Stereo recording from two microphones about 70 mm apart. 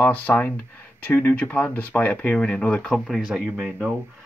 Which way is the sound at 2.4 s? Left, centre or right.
Centre.